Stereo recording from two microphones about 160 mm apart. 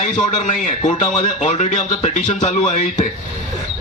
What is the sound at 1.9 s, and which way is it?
Speech, 30° left (ahead or behind).